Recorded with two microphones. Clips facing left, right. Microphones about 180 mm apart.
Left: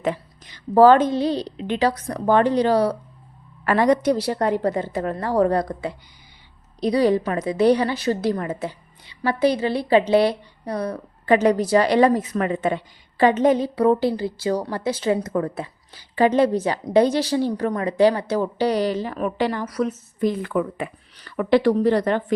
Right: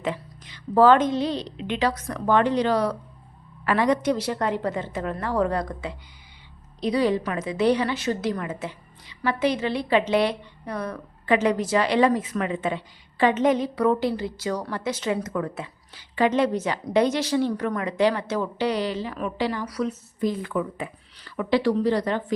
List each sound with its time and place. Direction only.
0.0 s a woman's voice: 45° left (ahead or behind)
3.6 s a woman's voice: 45° left (ahead or behind)